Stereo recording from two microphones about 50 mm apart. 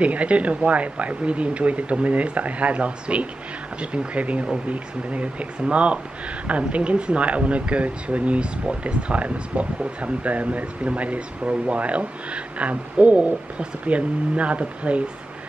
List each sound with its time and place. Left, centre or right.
0.0 s speech: right